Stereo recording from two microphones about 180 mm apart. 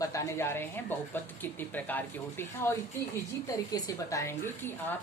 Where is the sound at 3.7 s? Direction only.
20° left (ahead or behind).